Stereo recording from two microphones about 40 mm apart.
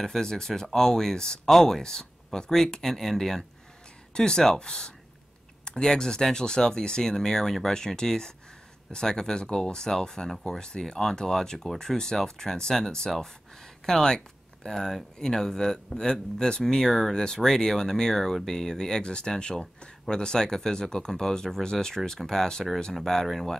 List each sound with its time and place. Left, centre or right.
0.0 s speech: centre
1.5 s speech: centre
1.8 s speech: centre
4.1 s speech: centre